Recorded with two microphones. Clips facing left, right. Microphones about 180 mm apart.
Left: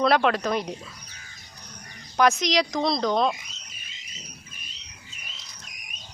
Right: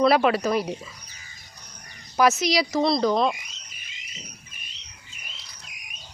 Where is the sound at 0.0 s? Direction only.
5° right (ahead or behind).